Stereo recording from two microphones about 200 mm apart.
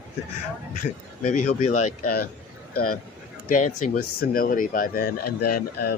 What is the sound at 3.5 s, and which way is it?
Speech, 40° left (ahead or behind).